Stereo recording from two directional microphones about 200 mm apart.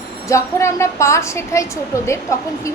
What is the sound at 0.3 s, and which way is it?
A woman's voice, 15° left (ahead or behind).